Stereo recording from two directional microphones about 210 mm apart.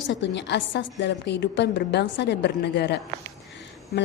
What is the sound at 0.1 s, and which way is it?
A woman's voice, 55° left (ahead or behind).